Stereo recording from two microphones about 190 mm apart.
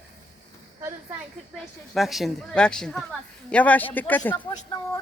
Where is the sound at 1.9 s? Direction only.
Centre (ahead or behind).